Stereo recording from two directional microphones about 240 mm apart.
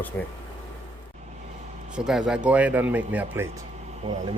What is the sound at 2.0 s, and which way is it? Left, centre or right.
Speech, centre.